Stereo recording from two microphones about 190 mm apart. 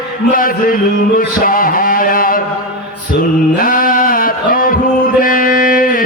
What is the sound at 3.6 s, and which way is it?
Male singing, 50° left (ahead or behind).